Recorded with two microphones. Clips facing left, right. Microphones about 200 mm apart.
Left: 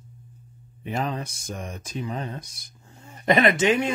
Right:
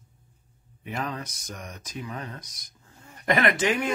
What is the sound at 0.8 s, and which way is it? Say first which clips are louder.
Speech: left 4 dB; 30° left (ahead or behind).